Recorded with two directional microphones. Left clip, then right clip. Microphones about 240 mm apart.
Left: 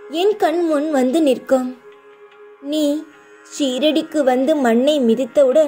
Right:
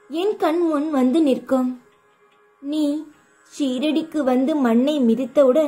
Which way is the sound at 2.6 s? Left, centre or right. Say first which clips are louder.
Left 4 dB; left.